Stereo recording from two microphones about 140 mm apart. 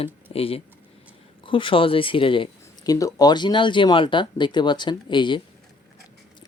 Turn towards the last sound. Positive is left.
turn(degrees=35)  # may be behind; listen again after turning